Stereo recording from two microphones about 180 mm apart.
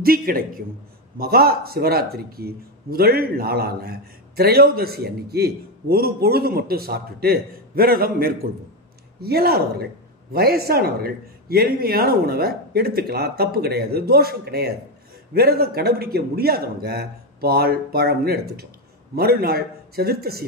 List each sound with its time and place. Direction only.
0.0 s a man's voice: 55° right (ahead or behind)